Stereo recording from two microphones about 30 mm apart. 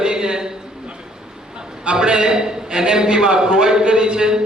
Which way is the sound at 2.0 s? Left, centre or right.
Right.